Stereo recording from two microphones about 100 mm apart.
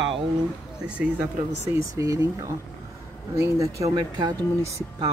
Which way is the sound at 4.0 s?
45° right (ahead or behind).